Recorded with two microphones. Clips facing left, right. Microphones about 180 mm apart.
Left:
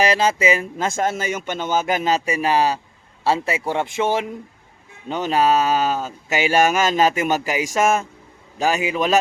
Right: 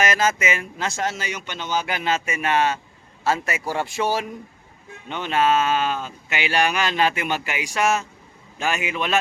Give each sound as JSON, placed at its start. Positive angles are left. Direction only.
{"t": 0.0, "sound": "speech", "side_deg": 30}
{"t": 5.0, "sound": "speech", "side_deg": 40}
{"t": 8.5, "sound": "speech", "side_deg": 35}